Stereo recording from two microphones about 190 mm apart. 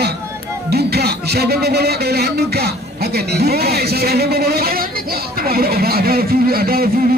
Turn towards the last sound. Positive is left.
turn(degrees=-55)  # may be behind; listen again after turning